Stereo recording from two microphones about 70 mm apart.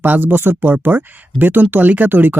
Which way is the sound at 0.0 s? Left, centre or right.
Right.